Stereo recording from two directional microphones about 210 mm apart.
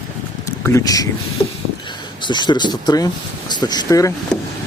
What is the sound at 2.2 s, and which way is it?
Speech, 20° left (ahead or behind).